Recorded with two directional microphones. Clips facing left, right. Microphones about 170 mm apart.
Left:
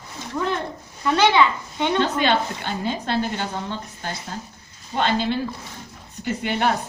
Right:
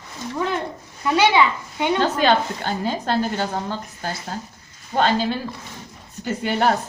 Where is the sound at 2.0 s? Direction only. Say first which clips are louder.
Right 2 dB; 40° right (ahead or behind).